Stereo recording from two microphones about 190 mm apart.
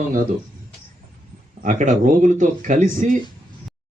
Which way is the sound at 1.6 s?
40° right (ahead or behind).